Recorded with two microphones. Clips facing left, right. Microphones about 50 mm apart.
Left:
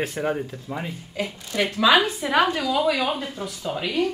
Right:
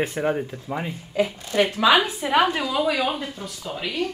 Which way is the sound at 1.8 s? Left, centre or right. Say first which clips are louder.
Left 3 dB; centre.